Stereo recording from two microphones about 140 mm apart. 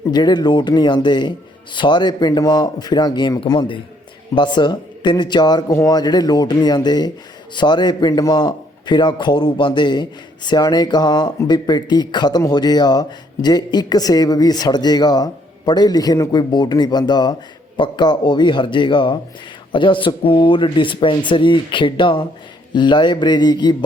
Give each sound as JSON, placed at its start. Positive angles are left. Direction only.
{"t": 0.1, "sound": "a man's voice", "side_deg": 30}